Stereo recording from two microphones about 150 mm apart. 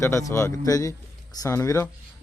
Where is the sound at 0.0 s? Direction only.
20° left (ahead or behind).